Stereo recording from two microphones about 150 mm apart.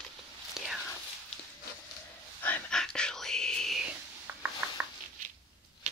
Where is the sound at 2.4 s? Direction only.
10° left (ahead or behind).